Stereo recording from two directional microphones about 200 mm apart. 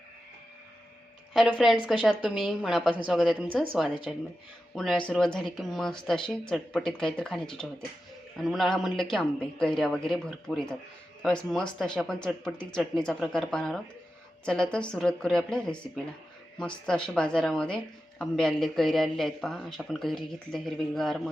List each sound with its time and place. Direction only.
1.3 s speech: centre (ahead or behind)